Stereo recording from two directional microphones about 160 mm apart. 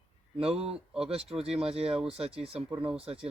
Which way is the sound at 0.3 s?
35° right (ahead or behind).